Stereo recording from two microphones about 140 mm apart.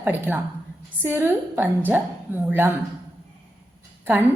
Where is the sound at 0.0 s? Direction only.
15° right (ahead or behind).